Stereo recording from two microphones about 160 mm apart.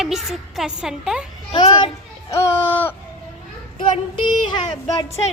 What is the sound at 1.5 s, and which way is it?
Children playing, 35° left (ahead or behind).